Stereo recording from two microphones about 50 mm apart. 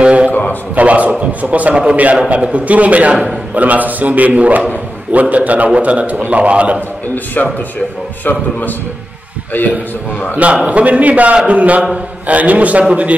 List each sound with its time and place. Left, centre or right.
0.0 s a sound: right
0.7 s a man's voice: right
7.4 s a man's voice: left
10.3 s a man's voice: right